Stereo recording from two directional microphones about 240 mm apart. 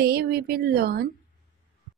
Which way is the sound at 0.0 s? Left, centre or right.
Right.